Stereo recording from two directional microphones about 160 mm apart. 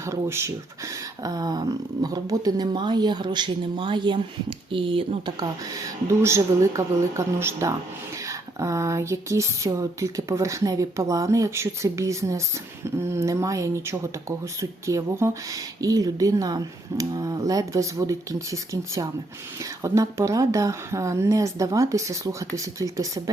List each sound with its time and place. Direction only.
0.0 s speech: 15° right (ahead or behind); by 5.5 s 30° right (ahead or behind)
6.1 s speech: 15° right (ahead or behind)